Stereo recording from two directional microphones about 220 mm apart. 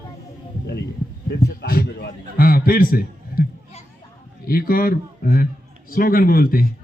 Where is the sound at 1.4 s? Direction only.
45° left (ahead or behind).